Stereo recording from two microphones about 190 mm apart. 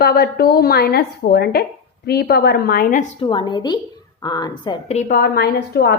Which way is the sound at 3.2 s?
25° left (ahead or behind).